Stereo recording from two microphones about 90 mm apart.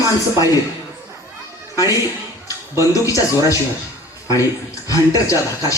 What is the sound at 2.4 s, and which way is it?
Speech, 35° left (ahead or behind).